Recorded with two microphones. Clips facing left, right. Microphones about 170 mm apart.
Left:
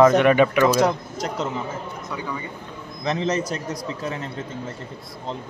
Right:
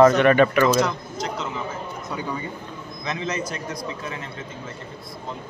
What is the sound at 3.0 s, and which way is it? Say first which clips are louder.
A man's voice: left 5 dB; 35° left (ahead or behind).